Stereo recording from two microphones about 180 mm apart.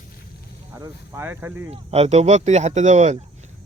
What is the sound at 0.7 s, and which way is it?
Speech, 15° right (ahead or behind).